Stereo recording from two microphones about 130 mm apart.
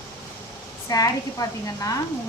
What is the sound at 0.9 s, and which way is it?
Speech, 25° left (ahead or behind).